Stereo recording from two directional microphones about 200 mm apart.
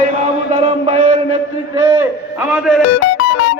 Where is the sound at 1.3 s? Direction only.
15° right (ahead or behind).